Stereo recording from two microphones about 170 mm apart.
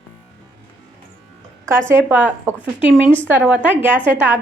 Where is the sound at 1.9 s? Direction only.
10° right (ahead or behind).